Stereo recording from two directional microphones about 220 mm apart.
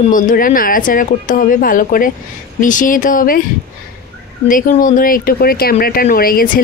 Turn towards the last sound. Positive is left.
turn(degrees=40)  # may be behind; listen again after turning